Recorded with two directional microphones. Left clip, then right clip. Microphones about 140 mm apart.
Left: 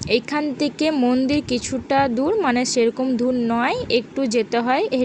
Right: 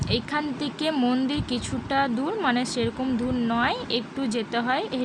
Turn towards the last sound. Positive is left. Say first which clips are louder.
# left 6 dB
turn(degrees=40)  # may be behind; listen again after turning